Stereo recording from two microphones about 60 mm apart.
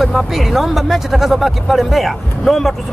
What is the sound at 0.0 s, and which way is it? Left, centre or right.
Speech, centre.